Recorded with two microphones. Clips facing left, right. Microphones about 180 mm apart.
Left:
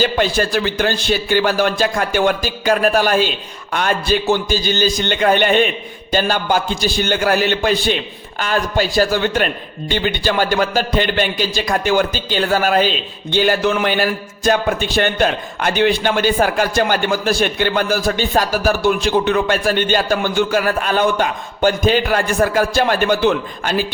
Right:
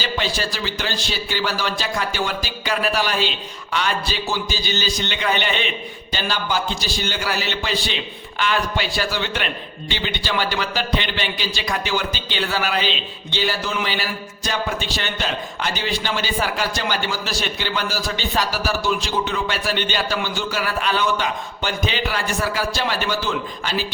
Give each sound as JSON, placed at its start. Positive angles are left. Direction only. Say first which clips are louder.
{"t": 0.0, "sound": "speech", "louder": "left 8 dB", "side_deg": 50}